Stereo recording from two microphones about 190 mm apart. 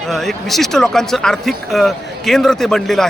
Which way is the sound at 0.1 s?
Centre (ahead or behind).